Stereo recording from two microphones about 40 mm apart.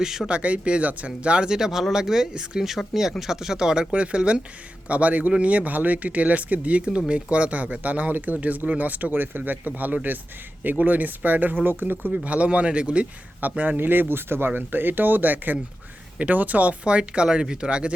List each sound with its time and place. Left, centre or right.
0.0 s speech: centre
0.3 s speech: right
1.5 s speech: centre
3.9 s speech: right
12.1 s speech: right
13.4 s speech: right
16.1 s speech: right
16.8 s speech: right